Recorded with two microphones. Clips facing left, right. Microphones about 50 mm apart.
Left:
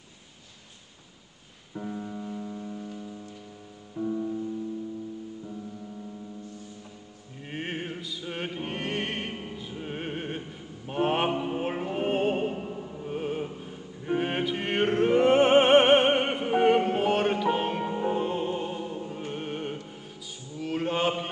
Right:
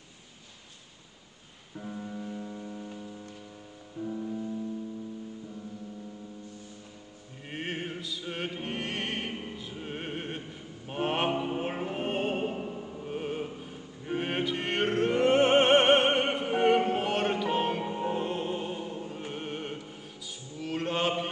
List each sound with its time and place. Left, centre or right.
1.8 s music: centre
4.0 s music: centre
7.4 s music: centre
10.9 s mantra: centre